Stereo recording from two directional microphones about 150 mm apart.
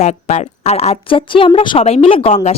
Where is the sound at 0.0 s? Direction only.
50° left (ahead or behind).